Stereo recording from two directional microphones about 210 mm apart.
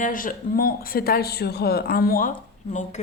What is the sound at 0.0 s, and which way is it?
Speech, 40° left (ahead or behind).